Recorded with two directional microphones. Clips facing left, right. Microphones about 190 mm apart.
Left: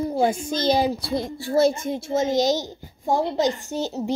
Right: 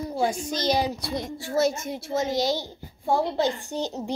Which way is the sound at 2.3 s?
45° left (ahead or behind).